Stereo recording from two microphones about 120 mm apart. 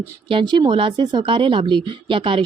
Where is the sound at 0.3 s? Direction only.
40° right (ahead or behind).